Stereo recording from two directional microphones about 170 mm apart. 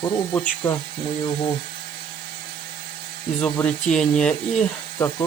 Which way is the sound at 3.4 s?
5° left (ahead or behind).